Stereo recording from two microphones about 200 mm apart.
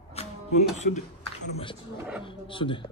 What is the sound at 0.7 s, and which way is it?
Speech, 35° left (ahead or behind).